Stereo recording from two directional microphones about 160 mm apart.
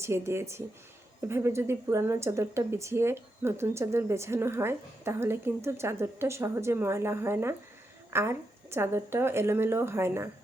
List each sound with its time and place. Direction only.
0.0 s speech: 15° right (ahead or behind)